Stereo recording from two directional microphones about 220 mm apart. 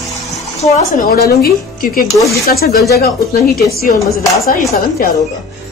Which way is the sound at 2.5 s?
45° left (ahead or behind).